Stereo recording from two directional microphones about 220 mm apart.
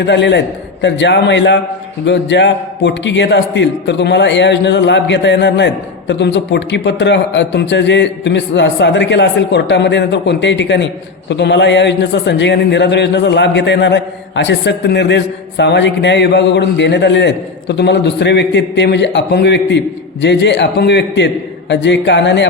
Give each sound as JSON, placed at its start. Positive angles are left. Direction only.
{"t": 0.0, "sound": "a man's voice", "side_deg": 55}